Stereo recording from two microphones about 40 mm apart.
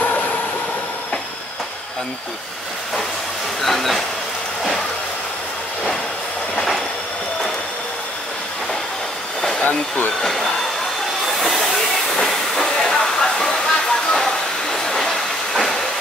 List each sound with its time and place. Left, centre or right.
3.6 s speech: centre
9.6 s speech: left
10.2 s speech: centre
11.2 s train: centre
14.2 s a sound: centre
15.0 s train: centre